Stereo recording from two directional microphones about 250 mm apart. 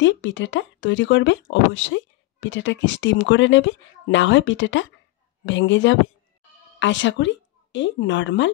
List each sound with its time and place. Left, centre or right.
0.0 s a woman's voice: left